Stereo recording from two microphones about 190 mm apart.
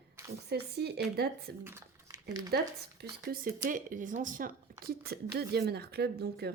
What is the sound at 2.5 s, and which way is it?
Speech, 55° right (ahead or behind).